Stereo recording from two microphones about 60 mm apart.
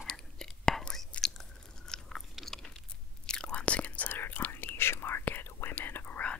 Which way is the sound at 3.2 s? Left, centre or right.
Centre.